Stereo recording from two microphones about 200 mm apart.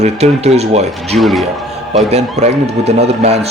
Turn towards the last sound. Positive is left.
turn(degrees=-30)  # may be behind; listen again after turning